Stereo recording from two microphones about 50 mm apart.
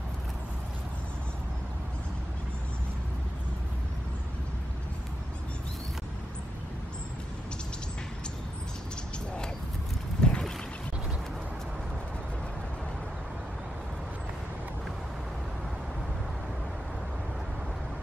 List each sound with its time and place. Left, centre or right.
10.2 s boat: centre